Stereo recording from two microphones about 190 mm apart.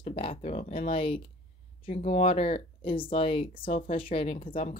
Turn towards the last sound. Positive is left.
turn(degrees=30)  # may be behind; listen again after turning